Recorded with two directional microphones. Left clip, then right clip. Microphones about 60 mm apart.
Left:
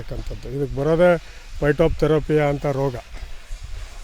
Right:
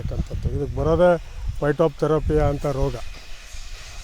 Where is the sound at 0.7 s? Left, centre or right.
Left.